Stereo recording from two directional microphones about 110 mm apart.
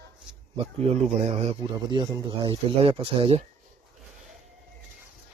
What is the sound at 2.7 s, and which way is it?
Speech, 60° right (ahead or behind).